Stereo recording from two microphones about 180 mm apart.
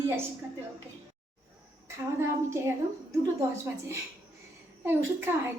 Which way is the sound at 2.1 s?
15° right (ahead or behind).